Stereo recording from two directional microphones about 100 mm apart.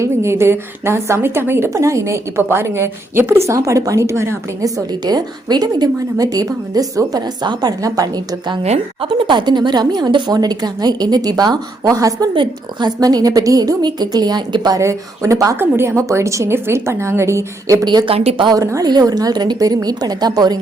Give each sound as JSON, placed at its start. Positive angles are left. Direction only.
{"t": 0.0, "sound": "a woman's voice", "side_deg": -25}
{"t": 4.9, "sound": "a woman's voice", "side_deg": -45}
{"t": 8.6, "sound": "a woman's voice", "side_deg": -90}
{"t": 9.0, "sound": "a woman's voice", "side_deg": -50}
{"t": 12.3, "sound": "a woman's voice", "side_deg": -50}
{"t": 14.8, "sound": "a woman's voice", "side_deg": -30}
{"t": 17.8, "sound": "a woman's voice", "side_deg": -50}
{"t": 18.1, "sound": "a woman's voice", "side_deg": -80}
{"t": 18.4, "sound": "a woman's voice", "side_deg": -35}